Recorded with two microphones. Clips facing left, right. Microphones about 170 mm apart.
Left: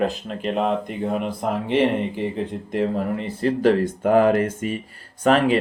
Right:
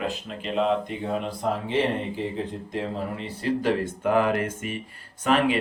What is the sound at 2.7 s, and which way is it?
Speech, 50° left (ahead or behind).